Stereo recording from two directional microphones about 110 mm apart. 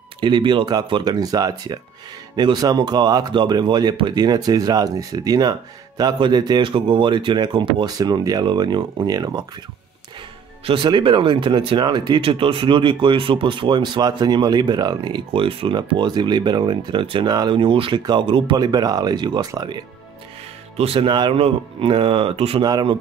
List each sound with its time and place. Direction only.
0.2 s speech: 45° right (ahead or behind)
10.6 s speech: 50° right (ahead or behind)
12.3 s speech: 55° right (ahead or behind)
17.6 s a man's voice: 55° right (ahead or behind)
20.7 s a man's voice: 60° right (ahead or behind)
22.6 s speech: 35° right (ahead or behind)